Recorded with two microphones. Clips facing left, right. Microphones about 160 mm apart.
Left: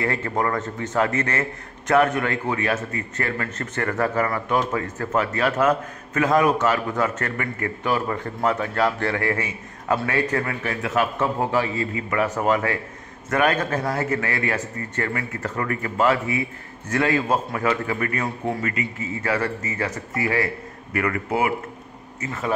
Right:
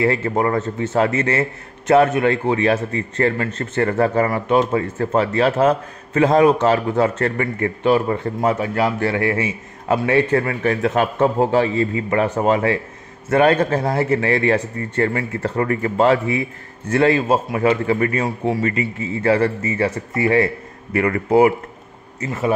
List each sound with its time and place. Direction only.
0.0 s a man's voice: 20° right (ahead or behind)
10.3 s a man's voice: 35° right (ahead or behind)